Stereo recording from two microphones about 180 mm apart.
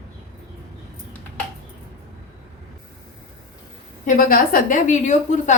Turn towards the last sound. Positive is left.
turn(degrees=40)  # may be behind; listen again after turning